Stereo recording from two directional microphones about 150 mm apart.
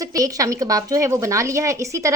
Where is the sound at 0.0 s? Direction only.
25° right (ahead or behind).